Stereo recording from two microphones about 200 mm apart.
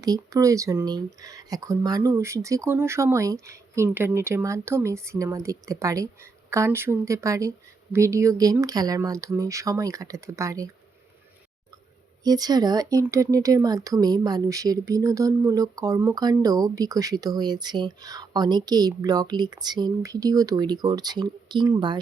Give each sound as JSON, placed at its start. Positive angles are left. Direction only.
{"t": 0.0, "sound": "speech", "side_deg": -15}
{"t": 12.2, "sound": "speech", "side_deg": -20}